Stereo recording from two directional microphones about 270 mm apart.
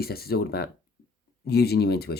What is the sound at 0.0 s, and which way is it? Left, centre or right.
Speech, left.